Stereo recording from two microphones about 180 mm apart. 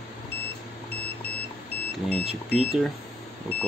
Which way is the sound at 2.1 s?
Centre (ahead or behind).